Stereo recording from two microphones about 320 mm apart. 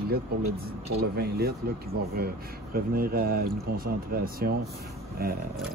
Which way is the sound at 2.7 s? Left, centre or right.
Right.